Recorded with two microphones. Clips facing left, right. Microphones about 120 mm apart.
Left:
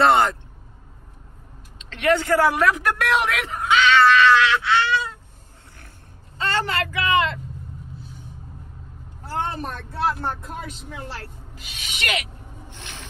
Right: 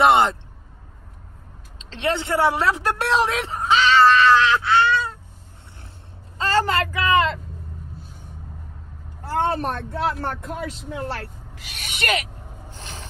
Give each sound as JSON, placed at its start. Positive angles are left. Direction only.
{"t": 0.0, "sound": "a sound", "side_deg": -20}
{"t": 1.8, "sound": "a woman's voice", "side_deg": -30}
{"t": 6.3, "sound": "a woman's voice", "side_deg": -35}
{"t": 9.2, "sound": "speech", "side_deg": -70}
{"t": 10.2, "sound": "speech", "side_deg": -90}
{"t": 11.6, "sound": "rub", "side_deg": -60}